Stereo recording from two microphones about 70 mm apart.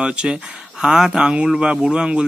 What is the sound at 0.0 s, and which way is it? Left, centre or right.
Speech, centre.